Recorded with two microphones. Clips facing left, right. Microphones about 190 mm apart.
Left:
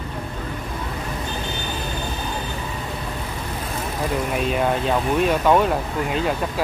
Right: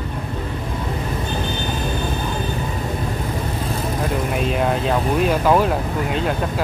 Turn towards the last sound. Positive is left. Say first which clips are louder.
# right 1 dB
turn(degrees=0)  # may be behind; listen again after turning